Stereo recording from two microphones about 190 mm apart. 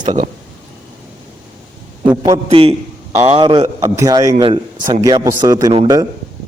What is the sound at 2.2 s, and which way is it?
A man's voice, 25° right (ahead or behind).